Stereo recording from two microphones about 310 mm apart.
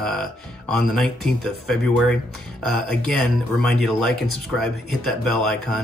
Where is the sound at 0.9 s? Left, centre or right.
Centre.